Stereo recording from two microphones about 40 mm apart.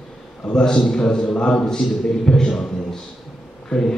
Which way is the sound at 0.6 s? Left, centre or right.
Centre.